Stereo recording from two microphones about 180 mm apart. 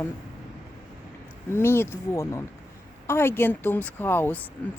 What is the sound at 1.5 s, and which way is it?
Speech, 15° left (ahead or behind).